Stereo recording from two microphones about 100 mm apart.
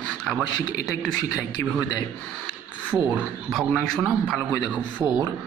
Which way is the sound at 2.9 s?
20° right (ahead or behind).